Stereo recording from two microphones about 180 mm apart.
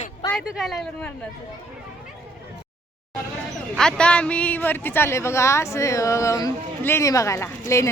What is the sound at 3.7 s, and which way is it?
Speech, 5° left (ahead or behind).